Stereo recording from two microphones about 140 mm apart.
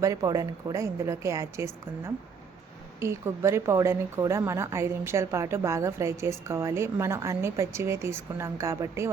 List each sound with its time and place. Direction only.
0.0 s a woman's voice: 25° right (ahead or behind)